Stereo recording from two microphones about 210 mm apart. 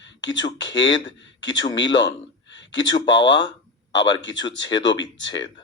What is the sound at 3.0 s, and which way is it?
Speech, 60° left (ahead or behind).